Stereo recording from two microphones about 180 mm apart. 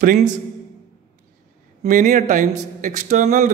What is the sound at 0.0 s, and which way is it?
Speech, 45° right (ahead or behind).